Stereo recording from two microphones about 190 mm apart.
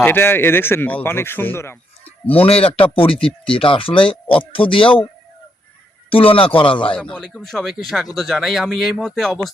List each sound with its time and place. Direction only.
0.0 s a man's voice: 10° left (ahead or behind)
2.5 s speech: 30° left (ahead or behind)
6.1 s speech: 30° left (ahead or behind)
6.9 s speech: 5° left (ahead or behind)